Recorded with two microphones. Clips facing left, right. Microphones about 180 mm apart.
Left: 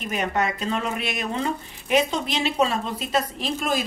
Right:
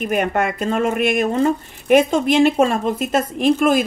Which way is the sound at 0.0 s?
55° right (ahead or behind).